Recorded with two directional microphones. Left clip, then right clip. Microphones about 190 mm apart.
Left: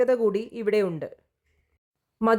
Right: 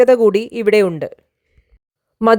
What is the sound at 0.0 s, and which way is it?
A woman's voice, 50° right (ahead or behind).